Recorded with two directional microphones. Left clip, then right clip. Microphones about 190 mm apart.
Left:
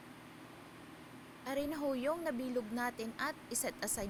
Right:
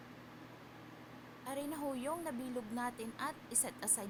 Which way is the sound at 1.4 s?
20° left (ahead or behind).